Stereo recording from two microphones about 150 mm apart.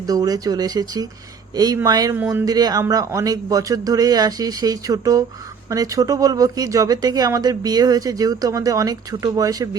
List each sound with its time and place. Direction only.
0.1 s speech: 25° right (ahead or behind)